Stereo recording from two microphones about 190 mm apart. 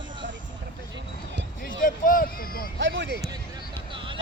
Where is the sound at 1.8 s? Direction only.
45° left (ahead or behind).